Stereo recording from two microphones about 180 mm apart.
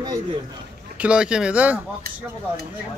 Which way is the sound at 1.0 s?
5° right (ahead or behind).